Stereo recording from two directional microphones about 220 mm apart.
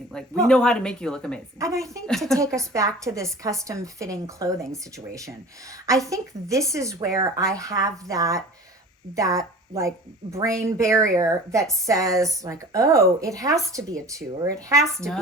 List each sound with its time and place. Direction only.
0.1 s speech: 5° left (ahead or behind)
1.5 s a woman's voice: 15° right (ahead or behind)
2.0 s speech: centre (ahead or behind)
2.4 s a woman's voice: 15° right (ahead or behind)
14.9 s speech: centre (ahead or behind)